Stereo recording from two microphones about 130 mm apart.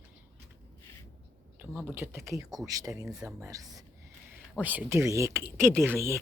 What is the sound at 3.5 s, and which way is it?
Speech, 25° right (ahead or behind).